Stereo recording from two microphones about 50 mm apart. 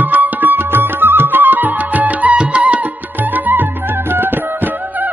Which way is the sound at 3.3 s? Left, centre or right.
Right.